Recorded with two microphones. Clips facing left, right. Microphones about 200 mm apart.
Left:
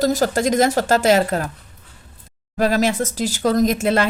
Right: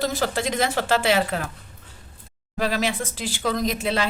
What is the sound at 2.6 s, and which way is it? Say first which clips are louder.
A woman's voice: left 6 dB; 45° left (ahead or behind).